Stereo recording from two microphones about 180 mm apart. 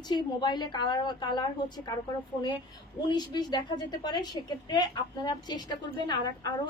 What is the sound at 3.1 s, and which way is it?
A woman's voice, 25° left (ahead or behind).